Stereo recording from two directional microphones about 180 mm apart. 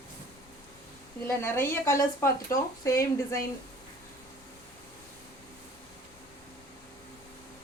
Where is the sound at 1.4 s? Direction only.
15° left (ahead or behind).